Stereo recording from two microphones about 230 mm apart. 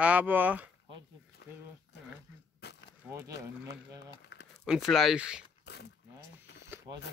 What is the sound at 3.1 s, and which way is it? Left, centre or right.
Speech, centre.